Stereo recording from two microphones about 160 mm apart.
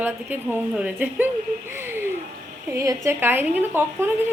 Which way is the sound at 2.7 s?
20° right (ahead or behind).